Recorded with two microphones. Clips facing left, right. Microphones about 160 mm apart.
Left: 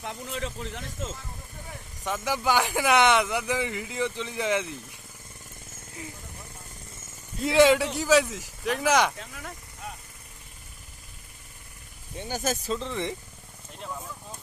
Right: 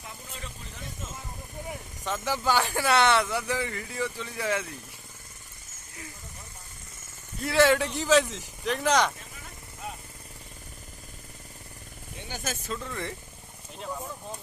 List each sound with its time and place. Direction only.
0.0 s a sound: 85° left
2.0 s speech: 15° left (ahead or behind)
7.4 s speech: 15° left (ahead or behind)
9.1 s speech: 75° left (ahead or behind)
12.3 s speech: 40° left (ahead or behind)
12.7 s speech: 20° left (ahead or behind)